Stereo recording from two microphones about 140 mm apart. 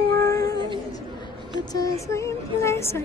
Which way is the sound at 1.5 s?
25° left (ahead or behind).